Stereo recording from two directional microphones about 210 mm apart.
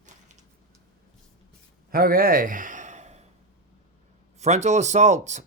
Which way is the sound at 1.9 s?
45° right (ahead or behind).